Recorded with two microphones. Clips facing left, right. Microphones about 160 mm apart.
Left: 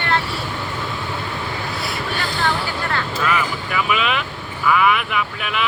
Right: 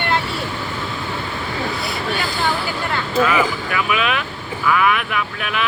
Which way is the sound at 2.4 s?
5° right (ahead or behind).